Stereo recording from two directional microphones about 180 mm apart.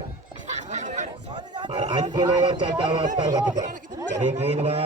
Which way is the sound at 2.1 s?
25° right (ahead or behind).